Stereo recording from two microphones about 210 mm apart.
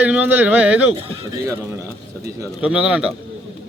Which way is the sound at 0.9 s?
25° right (ahead or behind).